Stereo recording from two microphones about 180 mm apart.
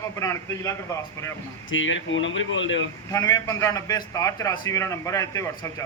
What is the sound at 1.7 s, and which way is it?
Speech, 90° left.